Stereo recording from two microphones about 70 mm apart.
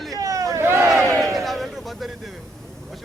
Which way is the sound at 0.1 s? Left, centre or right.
Right.